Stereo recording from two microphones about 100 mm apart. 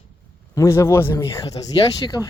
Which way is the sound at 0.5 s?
30° left (ahead or behind).